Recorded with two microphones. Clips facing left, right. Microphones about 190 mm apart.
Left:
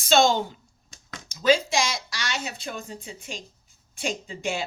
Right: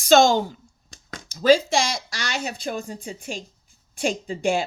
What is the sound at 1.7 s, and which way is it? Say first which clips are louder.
Speech: right 3 dB; 50° right (ahead or behind).